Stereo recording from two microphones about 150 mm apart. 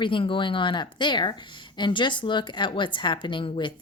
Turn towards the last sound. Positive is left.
turn(degrees=35)  # may be behind; listen again after turning